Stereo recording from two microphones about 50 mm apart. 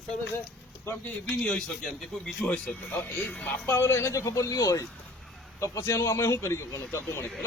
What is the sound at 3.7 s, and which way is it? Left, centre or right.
Speech, left.